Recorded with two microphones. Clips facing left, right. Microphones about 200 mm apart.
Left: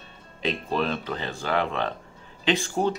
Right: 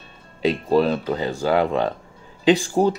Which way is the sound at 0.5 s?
40° right (ahead or behind).